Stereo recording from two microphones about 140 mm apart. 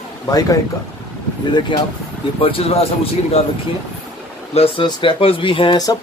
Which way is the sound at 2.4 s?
45° left (ahead or behind).